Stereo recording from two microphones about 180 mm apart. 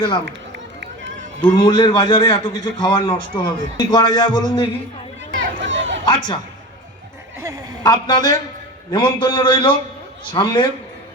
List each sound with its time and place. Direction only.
0.8 s run: 85° right
1.5 s a man's voice: 25° left (ahead or behind)
5.4 s run: 90° right
6.1 s a man's voice: 25° left (ahead or behind)
7.3 s speech: 15° right (ahead or behind)
7.9 s a man's voice: 25° left (ahead or behind)